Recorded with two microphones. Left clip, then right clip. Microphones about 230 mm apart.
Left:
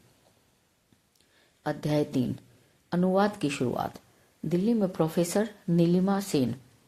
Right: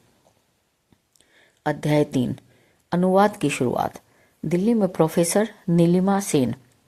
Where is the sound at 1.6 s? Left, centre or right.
Right.